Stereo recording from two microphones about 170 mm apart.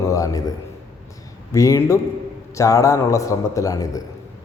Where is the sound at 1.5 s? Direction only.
20° left (ahead or behind).